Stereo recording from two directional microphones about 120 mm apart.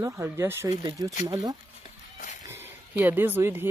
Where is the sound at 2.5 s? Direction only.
15° right (ahead or behind).